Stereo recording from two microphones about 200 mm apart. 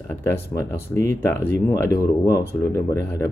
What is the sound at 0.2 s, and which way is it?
Speech, 10° left (ahead or behind).